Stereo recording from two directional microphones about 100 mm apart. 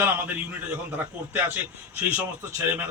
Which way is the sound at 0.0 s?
20° right (ahead or behind).